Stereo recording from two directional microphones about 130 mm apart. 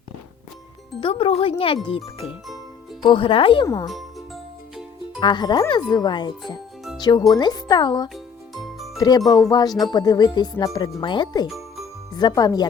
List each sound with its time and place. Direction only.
1.0 s speech: 45° left (ahead or behind)
3.0 s speech: 40° left (ahead or behind)
5.2 s speech: 35° left (ahead or behind)
8.6 s music: centre (ahead or behind)
9.0 s speech: 30° left (ahead or behind)
11.4 s music: centre (ahead or behind)
12.1 s speech: 30° left (ahead or behind)